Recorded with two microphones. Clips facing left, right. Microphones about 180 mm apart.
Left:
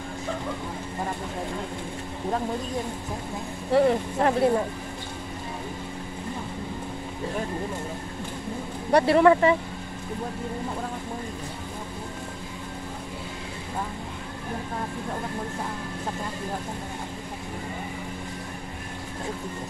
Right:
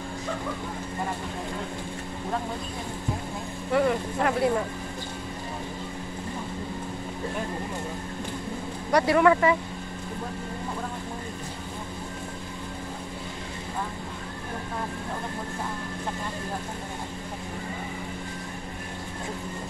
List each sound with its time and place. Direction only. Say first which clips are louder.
3.7 s speech: left 3 dB; 30° left (ahead or behind)
8.9 s speech: left 2 dB; 30° left (ahead or behind)